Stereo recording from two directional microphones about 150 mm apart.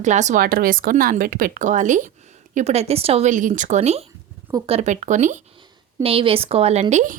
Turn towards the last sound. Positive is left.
turn(degrees=-55)  # may be behind; listen again after turning